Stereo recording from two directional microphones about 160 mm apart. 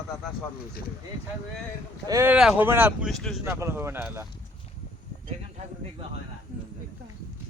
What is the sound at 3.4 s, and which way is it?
Speech, 15° right (ahead or behind).